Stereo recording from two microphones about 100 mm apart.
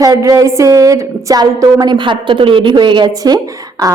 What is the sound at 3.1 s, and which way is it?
Speech, 35° right (ahead or behind).